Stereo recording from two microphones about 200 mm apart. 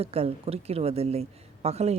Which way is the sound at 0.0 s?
30° right (ahead or behind).